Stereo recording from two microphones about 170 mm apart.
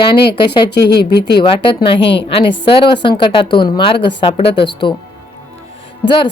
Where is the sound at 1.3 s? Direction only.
30° left (ahead or behind).